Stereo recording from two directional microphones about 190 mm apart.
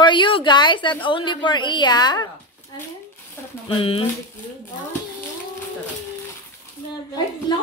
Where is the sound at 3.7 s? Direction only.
30° left (ahead or behind).